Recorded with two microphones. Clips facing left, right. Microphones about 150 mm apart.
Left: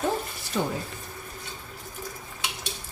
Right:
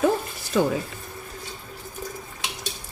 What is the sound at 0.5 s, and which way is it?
Speech, 90° right.